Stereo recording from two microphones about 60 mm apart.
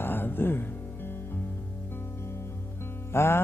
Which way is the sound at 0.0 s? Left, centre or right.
Left.